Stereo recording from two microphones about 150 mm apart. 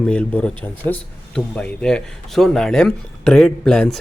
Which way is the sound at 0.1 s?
5° left (ahead or behind).